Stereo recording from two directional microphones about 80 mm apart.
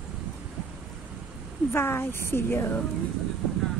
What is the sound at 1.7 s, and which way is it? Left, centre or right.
A woman's voice, left.